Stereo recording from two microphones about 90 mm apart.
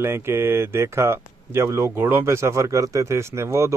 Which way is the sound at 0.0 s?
25° right (ahead or behind).